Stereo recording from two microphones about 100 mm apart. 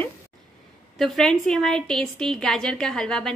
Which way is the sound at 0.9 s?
5° left (ahead or behind).